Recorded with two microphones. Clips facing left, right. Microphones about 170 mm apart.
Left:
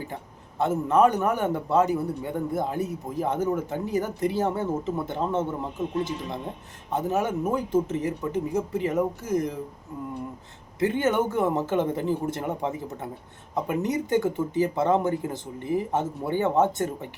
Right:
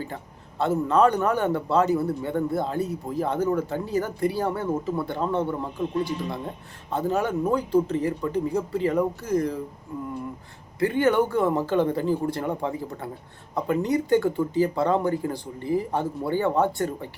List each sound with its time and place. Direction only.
0.6 s speech: 20° left (ahead or behind)
10.8 s speech: 20° left (ahead or behind)